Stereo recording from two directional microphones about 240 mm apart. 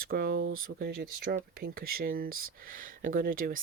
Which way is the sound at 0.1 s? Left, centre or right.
Right.